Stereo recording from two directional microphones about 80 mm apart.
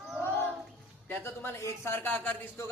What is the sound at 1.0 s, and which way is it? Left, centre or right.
Speech, left.